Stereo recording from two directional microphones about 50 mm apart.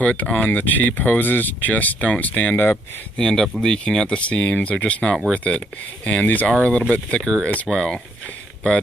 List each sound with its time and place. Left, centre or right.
0.0 s speech: left
2.5 s speech: left
3.2 s speech: centre; by 6.5 s left
6.9 s speech: centre